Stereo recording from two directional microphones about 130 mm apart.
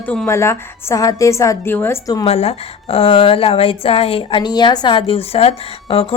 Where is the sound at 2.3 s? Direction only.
50° left (ahead or behind).